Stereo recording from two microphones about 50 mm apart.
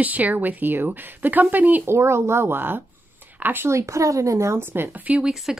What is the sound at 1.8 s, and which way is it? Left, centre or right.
Speech, right.